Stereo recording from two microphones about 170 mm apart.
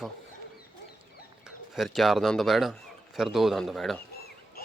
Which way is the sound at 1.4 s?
Centre (ahead or behind).